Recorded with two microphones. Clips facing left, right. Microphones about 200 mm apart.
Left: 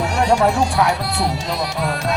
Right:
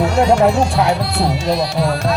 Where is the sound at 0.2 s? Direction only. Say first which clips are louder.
Right 3 dB; 25° right (ahead or behind).